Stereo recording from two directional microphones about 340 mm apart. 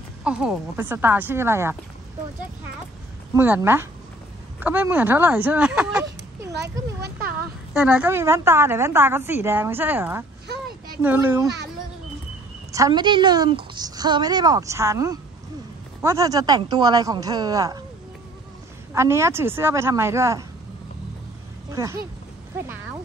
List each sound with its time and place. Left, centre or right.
0.2 s speech: centre
3.3 s speech: centre
6.5 s speech: right
7.7 s a woman's voice: centre
12.7 s a woman's voice: centre
18.9 s a woman's voice: centre